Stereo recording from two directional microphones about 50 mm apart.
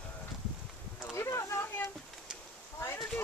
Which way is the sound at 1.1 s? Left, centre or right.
Left.